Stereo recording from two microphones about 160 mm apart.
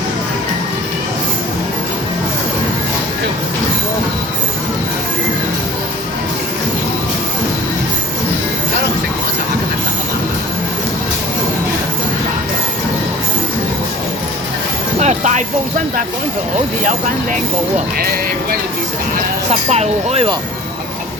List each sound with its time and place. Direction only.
14.9 s music: 50° right (ahead or behind)
17.9 s speech: 70° right (ahead or behind)
19.5 s speech: 45° right (ahead or behind)